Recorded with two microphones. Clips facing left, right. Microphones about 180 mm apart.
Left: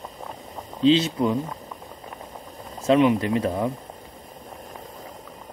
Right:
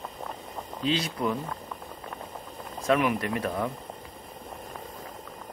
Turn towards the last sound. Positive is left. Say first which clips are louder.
# left 5 dB
turn(degrees=25)  # may be behind; listen again after turning